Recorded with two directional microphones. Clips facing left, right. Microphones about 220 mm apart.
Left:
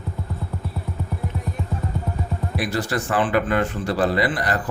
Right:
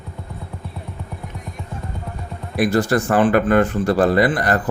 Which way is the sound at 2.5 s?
50° right (ahead or behind).